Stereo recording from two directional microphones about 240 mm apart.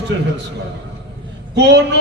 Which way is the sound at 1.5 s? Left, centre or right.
Right.